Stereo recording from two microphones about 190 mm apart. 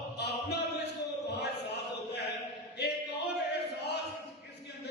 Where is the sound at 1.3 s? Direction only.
60° left (ahead or behind).